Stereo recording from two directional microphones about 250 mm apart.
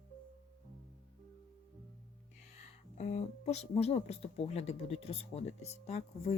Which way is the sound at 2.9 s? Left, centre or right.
Left.